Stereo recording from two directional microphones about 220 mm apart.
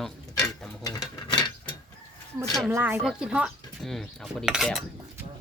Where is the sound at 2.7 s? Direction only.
10° right (ahead or behind).